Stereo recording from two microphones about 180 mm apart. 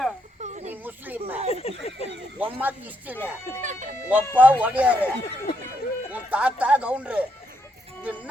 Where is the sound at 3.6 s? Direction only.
45° right (ahead or behind).